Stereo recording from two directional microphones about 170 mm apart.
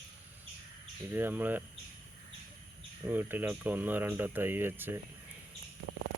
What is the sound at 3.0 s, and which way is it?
Speech, 10° right (ahead or behind).